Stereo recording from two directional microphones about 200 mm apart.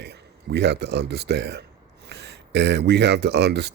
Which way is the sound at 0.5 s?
60° right (ahead or behind).